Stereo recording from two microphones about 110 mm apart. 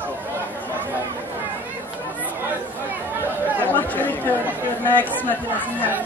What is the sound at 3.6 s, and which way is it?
Speech, 15° left (ahead or behind).